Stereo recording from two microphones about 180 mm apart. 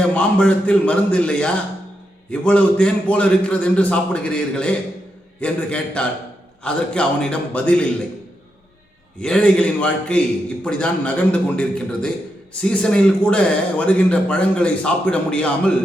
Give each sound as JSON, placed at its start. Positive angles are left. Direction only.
{"t": 0.1, "sound": "a man's voice", "side_deg": 5}
{"t": 9.2, "sound": "a man's voice", "side_deg": 5}